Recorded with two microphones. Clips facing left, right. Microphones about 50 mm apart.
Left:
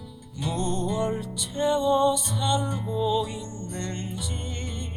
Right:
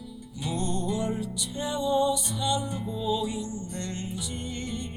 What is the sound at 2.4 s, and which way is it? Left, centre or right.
Music, left.